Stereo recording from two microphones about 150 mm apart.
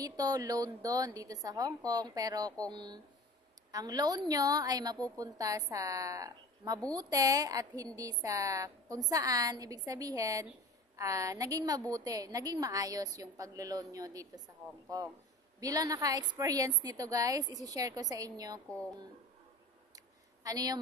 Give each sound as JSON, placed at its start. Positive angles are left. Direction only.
{"t": 0.0, "sound": "a woman's voice", "side_deg": -25}
{"t": 15.6, "sound": "a woman's voice", "side_deg": -25}
{"t": 20.4, "sound": "a woman's voice", "side_deg": -25}